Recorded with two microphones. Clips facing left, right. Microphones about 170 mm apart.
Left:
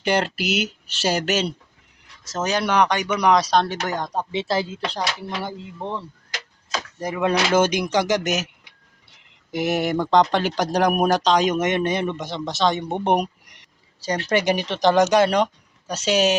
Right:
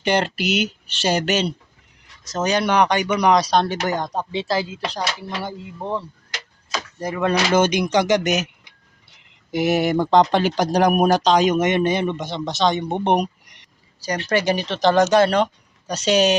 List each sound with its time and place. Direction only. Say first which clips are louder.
0.0 s speech: right 1 dB; 5° left (ahead or behind)
4.2 s speech: left 3 dB; 20° left (ahead or behind)
4.9 s speech: even; centre (ahead or behind)
6.7 s speech: right 1 dB; 15° left (ahead or behind)
9.5 s speech: right 3 dB; centre (ahead or behind)
14.3 s speech: right 1 dB; 20° left (ahead or behind)